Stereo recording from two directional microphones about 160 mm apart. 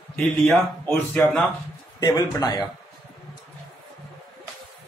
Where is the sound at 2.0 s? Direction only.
25° left (ahead or behind).